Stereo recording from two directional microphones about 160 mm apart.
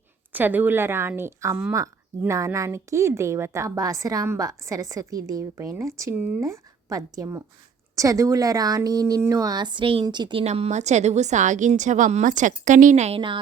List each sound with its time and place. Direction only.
0.3 s a woman's voice: 10° right (ahead or behind); by 10.4 s 30° right (ahead or behind)
10.4 s a woman's voice: 45° right (ahead or behind)
13.1 s speech: 30° right (ahead or behind)